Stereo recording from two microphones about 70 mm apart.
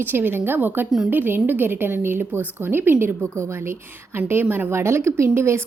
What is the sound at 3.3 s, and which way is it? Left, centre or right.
A woman's voice, right.